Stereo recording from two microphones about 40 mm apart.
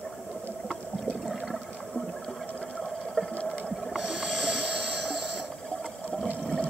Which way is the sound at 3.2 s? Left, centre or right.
Left.